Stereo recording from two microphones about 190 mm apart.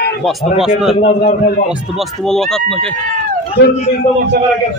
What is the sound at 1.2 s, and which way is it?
Speech, 45° left (ahead or behind).